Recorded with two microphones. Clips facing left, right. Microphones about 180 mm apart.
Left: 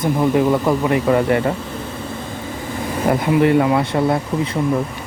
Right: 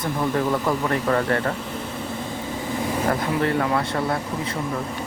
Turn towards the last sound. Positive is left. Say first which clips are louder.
# left 7 dB
turn(degrees=15)  # may be behind; listen again after turning